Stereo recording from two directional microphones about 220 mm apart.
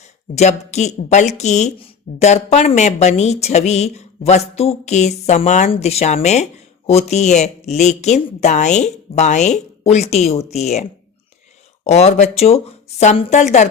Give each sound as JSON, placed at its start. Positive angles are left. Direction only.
{"t": 0.0, "sound": "speech", "side_deg": 30}
{"t": 11.9, "sound": "speech", "side_deg": 30}